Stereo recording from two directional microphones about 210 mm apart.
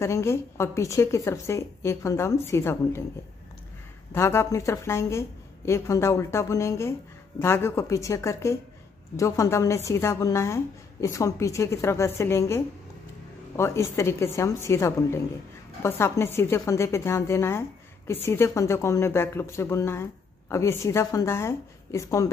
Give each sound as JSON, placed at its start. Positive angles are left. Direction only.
{"t": 0.0, "sound": "a woman's voice", "side_deg": 10}
{"t": 4.1, "sound": "a woman's voice", "side_deg": 10}